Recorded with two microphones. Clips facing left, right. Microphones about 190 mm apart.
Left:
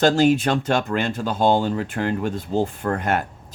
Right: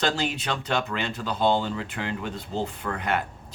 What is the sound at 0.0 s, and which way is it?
Speech, 45° left (ahead or behind).